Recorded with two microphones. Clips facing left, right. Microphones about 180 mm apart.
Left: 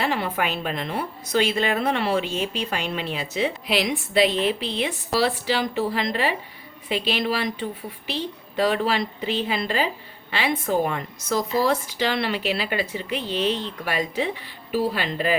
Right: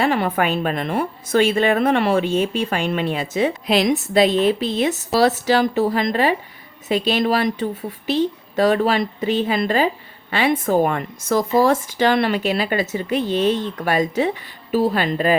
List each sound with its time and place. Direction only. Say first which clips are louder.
0.0 s a woman's voice: right 6 dB; 50° right (ahead or behind)